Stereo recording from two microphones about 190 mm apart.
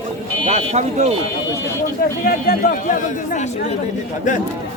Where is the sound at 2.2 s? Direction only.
50° left (ahead or behind).